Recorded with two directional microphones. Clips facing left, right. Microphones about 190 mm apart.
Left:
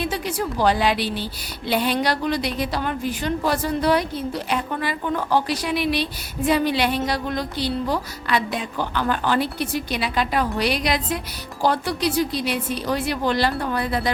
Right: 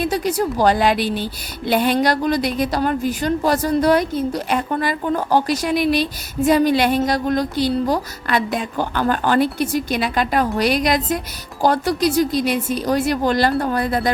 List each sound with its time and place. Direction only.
0.0 s a woman's voice: 40° right (ahead or behind)